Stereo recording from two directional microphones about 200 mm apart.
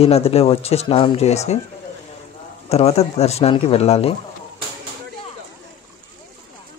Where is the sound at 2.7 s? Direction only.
30° left (ahead or behind).